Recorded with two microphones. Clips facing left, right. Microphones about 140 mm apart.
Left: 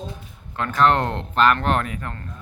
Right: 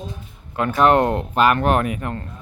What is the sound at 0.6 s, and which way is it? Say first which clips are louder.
Speech: right 4 dB; 10° right (ahead or behind).